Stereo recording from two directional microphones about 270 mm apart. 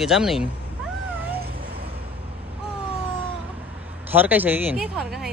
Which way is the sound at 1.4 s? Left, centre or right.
Right.